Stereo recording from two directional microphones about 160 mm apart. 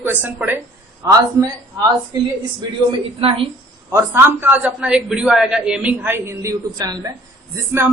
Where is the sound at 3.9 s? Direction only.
15° right (ahead or behind).